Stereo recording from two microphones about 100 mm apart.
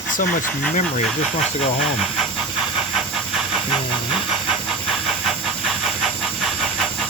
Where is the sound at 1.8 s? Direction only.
Centre (ahead or behind).